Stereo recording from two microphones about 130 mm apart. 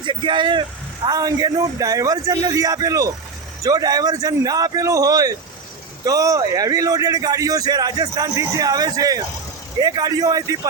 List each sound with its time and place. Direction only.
0.0 s a man's voice: 40° right (ahead or behind)